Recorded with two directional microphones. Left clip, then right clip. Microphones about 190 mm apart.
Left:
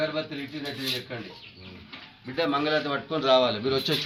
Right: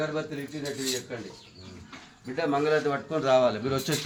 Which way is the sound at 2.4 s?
30° right (ahead or behind).